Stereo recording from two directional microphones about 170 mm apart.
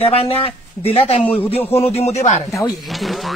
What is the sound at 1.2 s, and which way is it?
Speech, 10° left (ahead or behind).